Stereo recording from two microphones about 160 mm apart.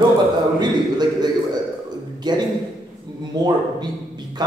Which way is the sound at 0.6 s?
25° right (ahead or behind).